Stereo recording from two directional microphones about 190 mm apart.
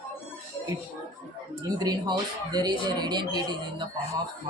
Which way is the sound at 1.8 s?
20° right (ahead or behind).